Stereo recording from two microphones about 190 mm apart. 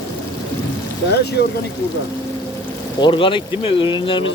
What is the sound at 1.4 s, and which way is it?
Speech, 60° left (ahead or behind).